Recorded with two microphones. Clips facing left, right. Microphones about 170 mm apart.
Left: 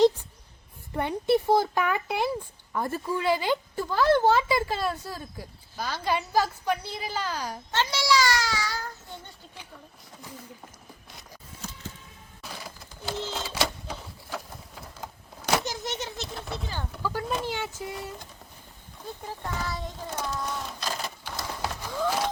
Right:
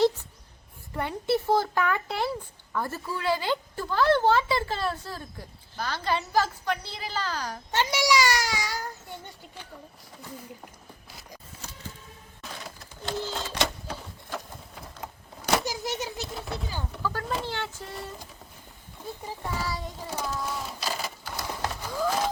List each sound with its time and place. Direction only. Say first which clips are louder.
0.9 s a woman's voice: left 3 dB; 20° left (ahead or behind)
7.7 s a child's voice: right 1 dB; 15° right (ahead or behind)
12.4 s a sound: even; 5° left (ahead or behind)
17.0 s a sound: left 1 dB; 15° left (ahead or behind)
17.4 s a woman's voice: left 2 dB; 10° left (ahead or behind)
19.2 s a child's voice: right 1 dB; 5° right (ahead or behind)
21.6 s run: even; 5° right (ahead or behind)